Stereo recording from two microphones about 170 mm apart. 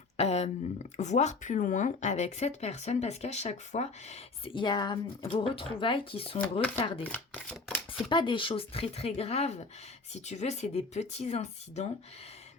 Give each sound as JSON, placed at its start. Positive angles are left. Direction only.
{"t": 0.2, "sound": "speech", "side_deg": 40}
{"t": 6.4, "sound": "speech", "side_deg": 10}
{"t": 8.1, "sound": "speech", "side_deg": 30}